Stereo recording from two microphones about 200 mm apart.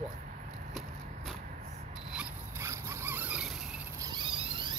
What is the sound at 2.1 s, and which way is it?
Zipper, 10° right (ahead or behind).